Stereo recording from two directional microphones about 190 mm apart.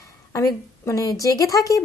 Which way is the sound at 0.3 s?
15° left (ahead or behind).